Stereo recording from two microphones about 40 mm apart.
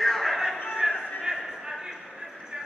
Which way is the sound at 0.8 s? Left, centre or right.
Centre.